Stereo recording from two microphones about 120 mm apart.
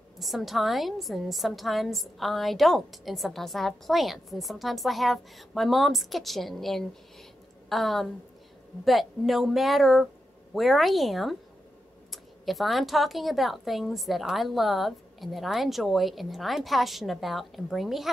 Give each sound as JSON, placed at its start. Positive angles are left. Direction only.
{"t": 0.2, "sound": "a woman's voice", "side_deg": 0}